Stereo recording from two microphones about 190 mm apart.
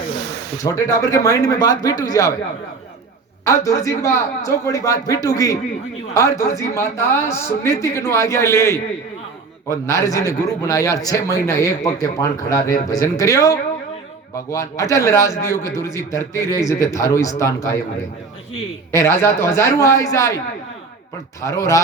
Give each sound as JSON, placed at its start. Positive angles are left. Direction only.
{"t": 0.6, "sound": "speech", "side_deg": 15}
{"t": 3.4, "sound": "a man's voice", "side_deg": 15}
{"t": 18.9, "sound": "a man's voice", "side_deg": 15}
{"t": 21.4, "sound": "a man's voice", "side_deg": 15}